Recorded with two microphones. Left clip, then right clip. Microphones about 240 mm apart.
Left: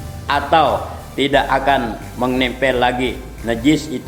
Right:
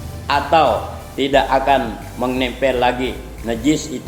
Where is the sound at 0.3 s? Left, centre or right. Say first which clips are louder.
Even; left.